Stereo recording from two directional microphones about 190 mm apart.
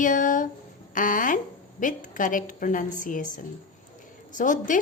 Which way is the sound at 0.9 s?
45° left (ahead or behind).